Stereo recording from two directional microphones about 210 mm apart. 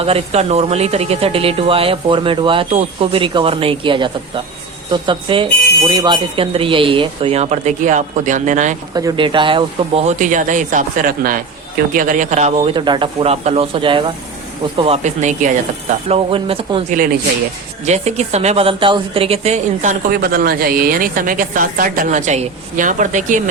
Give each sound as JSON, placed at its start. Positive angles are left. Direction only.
{"t": 0.0, "sound": "speech", "side_deg": -30}
{"t": 9.0, "sound": "a woman's voice", "side_deg": -20}